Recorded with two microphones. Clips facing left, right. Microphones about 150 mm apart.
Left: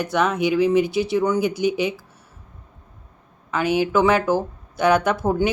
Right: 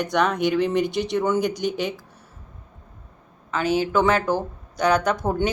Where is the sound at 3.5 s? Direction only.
10° left (ahead or behind).